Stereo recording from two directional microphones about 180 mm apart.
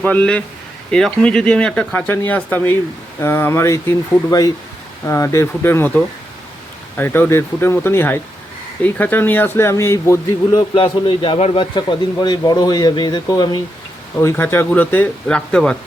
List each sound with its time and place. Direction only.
0.0 s speech: 10° left (ahead or behind)
10.8 s a man's voice: 30° left (ahead or behind); by 15.8 s 5° left (ahead or behind)